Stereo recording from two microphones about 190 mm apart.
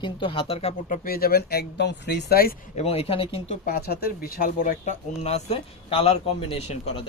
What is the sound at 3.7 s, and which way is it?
Speech, 55° left (ahead or behind).